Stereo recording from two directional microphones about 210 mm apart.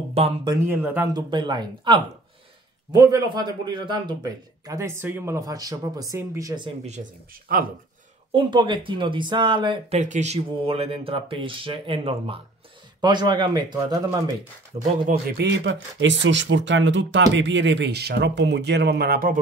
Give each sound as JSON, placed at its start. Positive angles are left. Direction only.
{"t": 0.1, "sound": "speech", "side_deg": -30}
{"t": 0.7, "sound": "a man's voice", "side_deg": -10}
{"t": 1.3, "sound": "a man's voice", "side_deg": -20}
{"t": 7.5, "sound": "speech", "side_deg": -45}
{"t": 8.3, "sound": "speech", "side_deg": -25}
{"t": 9.9, "sound": "speech", "side_deg": -35}
{"t": 14.8, "sound": "speech", "side_deg": -40}